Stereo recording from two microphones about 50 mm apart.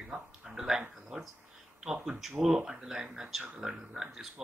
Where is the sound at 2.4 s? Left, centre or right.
Centre.